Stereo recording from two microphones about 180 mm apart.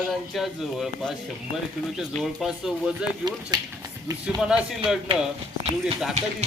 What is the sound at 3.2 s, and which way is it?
Speech, 20° right (ahead or behind).